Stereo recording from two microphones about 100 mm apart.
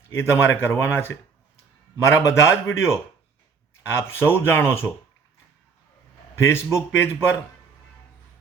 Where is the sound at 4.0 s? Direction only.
20° left (ahead or behind).